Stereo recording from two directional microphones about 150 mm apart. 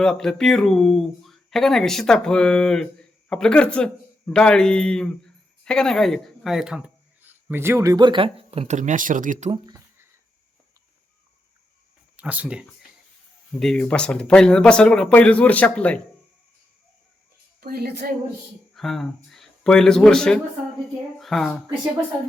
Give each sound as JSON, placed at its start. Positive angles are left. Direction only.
{"t": 0.0, "sound": "speech", "side_deg": 5}
{"t": 9.5, "sound": "speech", "side_deg": -25}
{"t": 12.1, "sound": "speech", "side_deg": -10}
{"t": 13.5, "sound": "speech", "side_deg": 5}
{"t": 17.6, "sound": "a woman's voice", "side_deg": -90}
{"t": 18.7, "sound": "speech", "side_deg": 0}
{"t": 21.2, "sound": "a sound", "side_deg": 0}